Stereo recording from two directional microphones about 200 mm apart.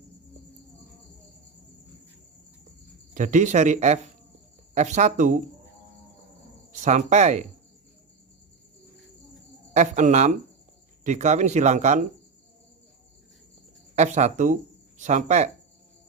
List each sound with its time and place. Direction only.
3.2 s speech: 35° right (ahead or behind)
6.8 s speech: 35° right (ahead or behind)
9.7 s speech: 35° right (ahead or behind)
13.9 s speech: 35° right (ahead or behind)